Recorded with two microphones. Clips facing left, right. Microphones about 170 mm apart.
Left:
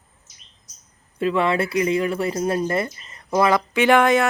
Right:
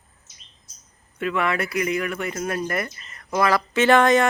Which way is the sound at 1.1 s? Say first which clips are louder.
Left 4 dB; 30° left (ahead or behind).